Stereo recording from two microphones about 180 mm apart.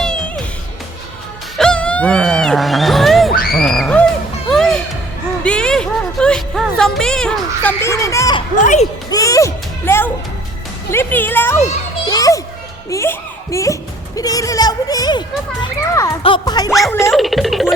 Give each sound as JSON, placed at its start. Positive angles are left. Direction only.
{"t": 0.0, "sound": "music", "side_deg": 0}
{"t": 1.5, "sound": "a sound", "side_deg": 5}
{"t": 5.4, "sound": "music", "side_deg": 5}
{"t": 8.6, "sound": "speech", "side_deg": 40}
{"t": 9.0, "sound": "music", "side_deg": 20}
{"t": 10.9, "sound": "speech", "side_deg": 10}
{"t": 12.0, "sound": "children playing", "side_deg": 20}
{"t": 12.9, "sound": "music", "side_deg": 15}
{"t": 14.2, "sound": "a sound", "side_deg": 20}
{"t": 15.6, "sound": "children playing", "side_deg": 15}
{"t": 16.2, "sound": "music", "side_deg": 25}
{"t": 16.6, "sound": "music", "side_deg": 0}
{"t": 17.0, "sound": "a sound", "side_deg": 0}